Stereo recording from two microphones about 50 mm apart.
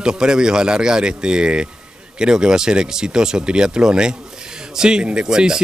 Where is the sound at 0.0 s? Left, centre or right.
Centre.